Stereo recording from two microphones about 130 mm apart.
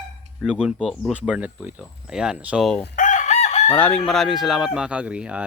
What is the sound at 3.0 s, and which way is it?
Chicken, 75° left (ahead or behind).